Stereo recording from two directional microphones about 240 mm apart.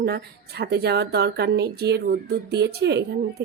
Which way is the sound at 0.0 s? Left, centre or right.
Right.